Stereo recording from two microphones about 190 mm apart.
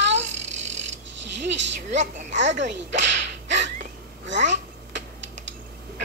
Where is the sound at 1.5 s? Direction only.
70° right (ahead or behind).